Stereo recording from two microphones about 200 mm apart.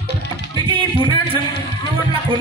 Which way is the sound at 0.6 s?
25° right (ahead or behind).